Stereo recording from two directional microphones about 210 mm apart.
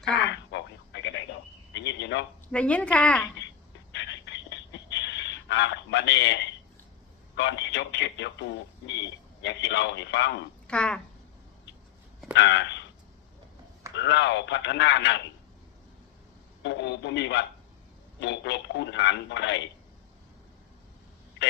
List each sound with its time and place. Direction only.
0.2 s telephone: 55° left (ahead or behind)
2.5 s a woman's voice: 5° left (ahead or behind)
3.9 s a sound: 55° left (ahead or behind)
7.3 s speech: 55° left (ahead or behind)
10.7 s a woman's voice: 5° left (ahead or behind)
12.3 s speech: 55° left (ahead or behind)
13.9 s speech: 55° left (ahead or behind)
16.6 s speech: 55° left (ahead or behind)